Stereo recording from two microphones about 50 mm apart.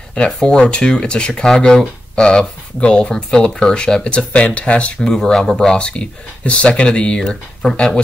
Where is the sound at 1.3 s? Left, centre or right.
Centre; by 5.1 s left.